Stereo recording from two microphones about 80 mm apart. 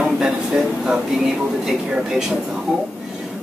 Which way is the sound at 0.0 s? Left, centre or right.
Centre.